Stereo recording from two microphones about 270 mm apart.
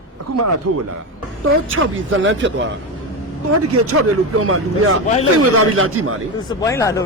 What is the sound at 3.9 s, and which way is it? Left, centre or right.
A man's voice, right.